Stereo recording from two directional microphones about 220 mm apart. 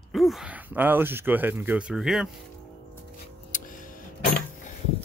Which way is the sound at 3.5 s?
35° left (ahead or behind).